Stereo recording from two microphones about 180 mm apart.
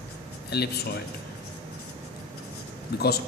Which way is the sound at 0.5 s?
65° left (ahead or behind).